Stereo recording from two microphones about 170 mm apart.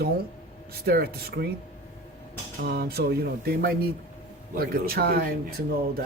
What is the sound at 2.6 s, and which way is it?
Speech, 65° right (ahead or behind).